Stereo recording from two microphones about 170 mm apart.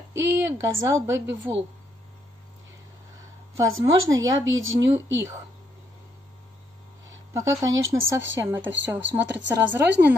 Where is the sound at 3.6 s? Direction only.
20° right (ahead or behind).